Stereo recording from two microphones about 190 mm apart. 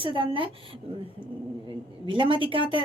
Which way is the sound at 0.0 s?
25° right (ahead or behind).